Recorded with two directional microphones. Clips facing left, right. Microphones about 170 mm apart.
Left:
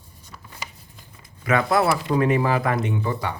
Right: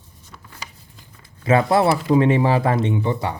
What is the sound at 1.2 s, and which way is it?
Speech, 30° right (ahead or behind).